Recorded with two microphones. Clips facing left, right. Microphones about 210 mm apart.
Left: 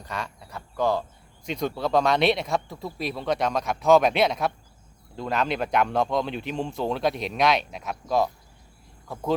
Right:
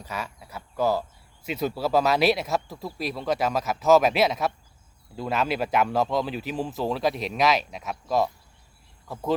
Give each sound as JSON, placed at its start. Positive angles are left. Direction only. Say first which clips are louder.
{"t": 0.0, "sound": "speech", "louder": "even", "side_deg": -5}